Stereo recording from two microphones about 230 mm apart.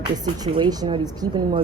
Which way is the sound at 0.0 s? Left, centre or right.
Centre.